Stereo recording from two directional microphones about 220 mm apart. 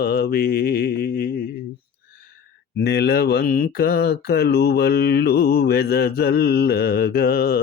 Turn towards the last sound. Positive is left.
turn(degrees=45)  # may be behind; listen again after turning